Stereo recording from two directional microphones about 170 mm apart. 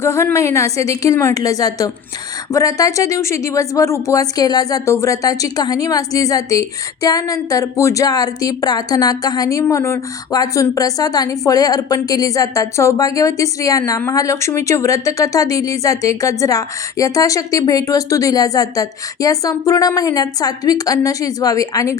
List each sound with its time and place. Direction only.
0.0 s a woman's voice: 15° left (ahead or behind)